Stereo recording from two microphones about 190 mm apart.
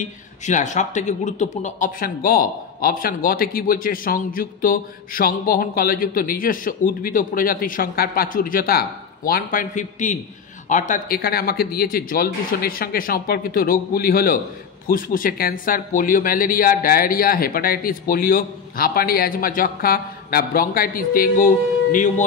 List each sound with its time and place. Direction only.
0.0 s speech: 40° left (ahead or behind)